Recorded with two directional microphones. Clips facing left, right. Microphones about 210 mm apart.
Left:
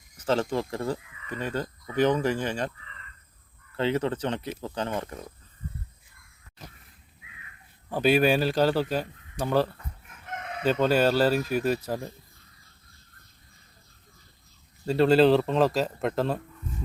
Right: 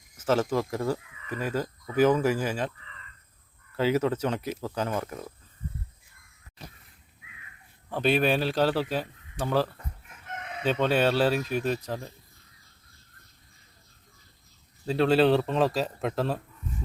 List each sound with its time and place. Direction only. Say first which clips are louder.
0.2 s speech: right 1 dB; 5° right (ahead or behind)
3.8 s speech: right 2 dB; 10° right (ahead or behind)
7.9 s a man's voice: left 3 dB; 5° left (ahead or behind)
14.8 s a man's voice: left 2 dB; centre (ahead or behind)